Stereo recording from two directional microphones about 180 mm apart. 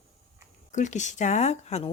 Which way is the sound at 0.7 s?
40° left (ahead or behind).